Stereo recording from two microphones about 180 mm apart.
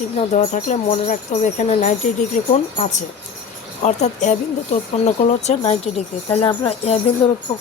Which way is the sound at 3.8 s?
40° left (ahead or behind).